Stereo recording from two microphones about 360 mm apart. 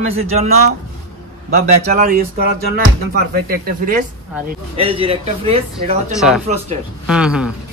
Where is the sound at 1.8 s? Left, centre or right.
Right.